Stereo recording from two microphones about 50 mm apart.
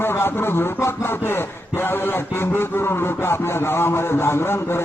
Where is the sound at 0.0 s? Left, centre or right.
Left.